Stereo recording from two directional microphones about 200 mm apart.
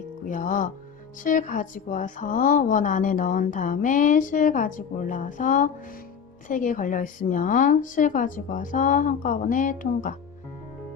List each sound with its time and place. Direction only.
0.3 s a woman's voice: 40° left (ahead or behind)